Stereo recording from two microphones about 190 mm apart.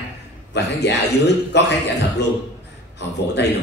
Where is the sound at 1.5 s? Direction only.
65° left (ahead or behind).